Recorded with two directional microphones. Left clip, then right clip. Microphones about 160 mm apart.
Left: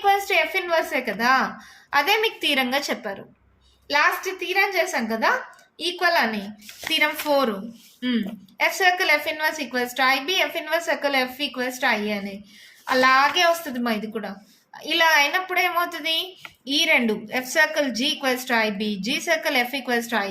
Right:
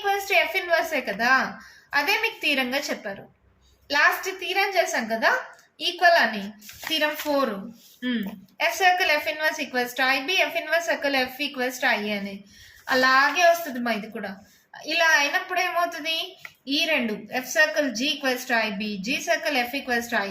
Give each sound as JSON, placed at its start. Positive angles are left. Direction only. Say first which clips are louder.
{"t": 0.0, "sound": "a woman's voice", "louder": "left 3 dB", "side_deg": 40}